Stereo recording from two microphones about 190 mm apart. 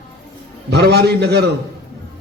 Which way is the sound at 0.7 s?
60° right (ahead or behind).